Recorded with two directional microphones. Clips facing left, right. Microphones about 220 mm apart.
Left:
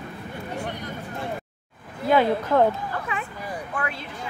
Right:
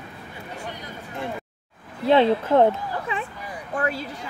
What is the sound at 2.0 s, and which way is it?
Speech, 25° right (ahead or behind).